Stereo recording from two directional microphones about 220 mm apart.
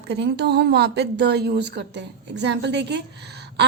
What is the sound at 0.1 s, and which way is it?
A woman's voice, 50° right (ahead or behind).